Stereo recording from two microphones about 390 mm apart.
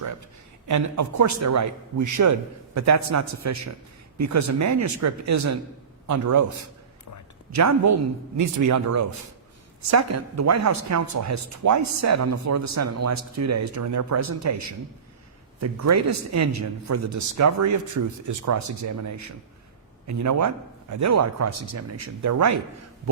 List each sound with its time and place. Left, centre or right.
0.0 s speech: right